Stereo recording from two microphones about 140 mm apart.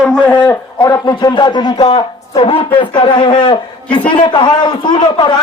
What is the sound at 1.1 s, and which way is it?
A man's voice, 35° left (ahead or behind).